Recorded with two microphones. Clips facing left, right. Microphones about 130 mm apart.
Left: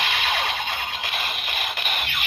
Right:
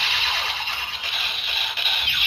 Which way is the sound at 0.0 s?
50° left (ahead or behind).